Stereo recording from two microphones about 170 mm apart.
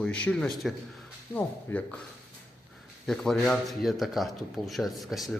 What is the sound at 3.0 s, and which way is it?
A man's voice, 5° left (ahead or behind).